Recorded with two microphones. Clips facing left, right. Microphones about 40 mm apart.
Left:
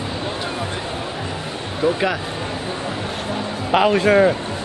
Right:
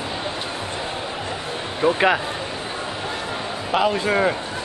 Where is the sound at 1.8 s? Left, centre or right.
Right.